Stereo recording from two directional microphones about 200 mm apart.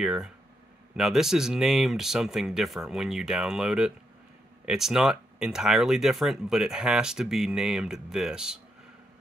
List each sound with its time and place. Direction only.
0.0 s speech: 5° right (ahead or behind)